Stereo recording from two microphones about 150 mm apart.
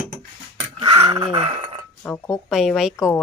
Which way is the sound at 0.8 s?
35° right (ahead or behind).